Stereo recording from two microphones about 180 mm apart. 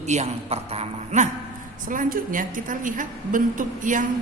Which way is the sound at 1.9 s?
50° right (ahead or behind).